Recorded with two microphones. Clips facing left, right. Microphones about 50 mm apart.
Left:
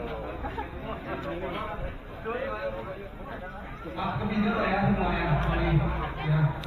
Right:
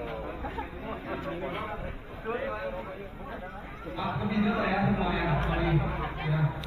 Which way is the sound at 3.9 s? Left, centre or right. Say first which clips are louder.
Left 1 dB; left.